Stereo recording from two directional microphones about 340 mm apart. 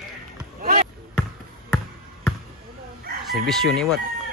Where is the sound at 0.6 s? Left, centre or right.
Right.